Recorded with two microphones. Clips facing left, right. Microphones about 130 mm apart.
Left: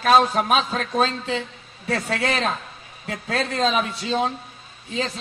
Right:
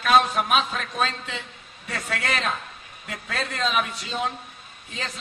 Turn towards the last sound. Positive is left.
turn(degrees=30)  # may be behind; listen again after turning